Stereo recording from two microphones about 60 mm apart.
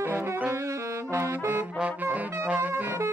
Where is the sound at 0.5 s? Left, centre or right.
Right.